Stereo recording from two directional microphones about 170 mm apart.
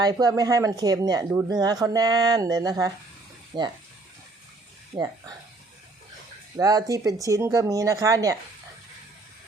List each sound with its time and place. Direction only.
0.0 s speech: 25° right (ahead or behind)
6.6 s speech: 20° right (ahead or behind)